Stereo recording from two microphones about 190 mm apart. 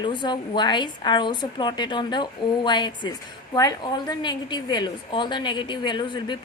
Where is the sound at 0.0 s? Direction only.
25° left (ahead or behind).